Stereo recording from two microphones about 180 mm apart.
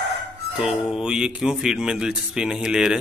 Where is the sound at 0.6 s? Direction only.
5° right (ahead or behind).